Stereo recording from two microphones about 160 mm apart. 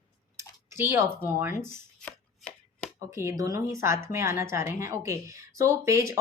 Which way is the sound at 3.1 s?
20° right (ahead or behind).